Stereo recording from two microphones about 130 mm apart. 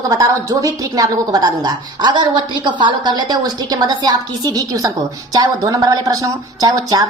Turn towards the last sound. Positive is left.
turn(degrees=-30)  # may be behind; listen again after turning